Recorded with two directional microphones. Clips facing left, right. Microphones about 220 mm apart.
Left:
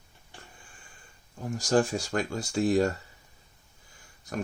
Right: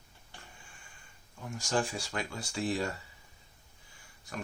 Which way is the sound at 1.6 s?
40° left (ahead or behind).